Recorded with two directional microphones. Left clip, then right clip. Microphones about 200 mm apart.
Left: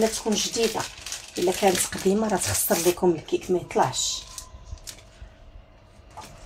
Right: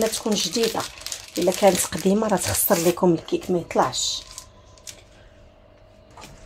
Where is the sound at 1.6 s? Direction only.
35° right (ahead or behind).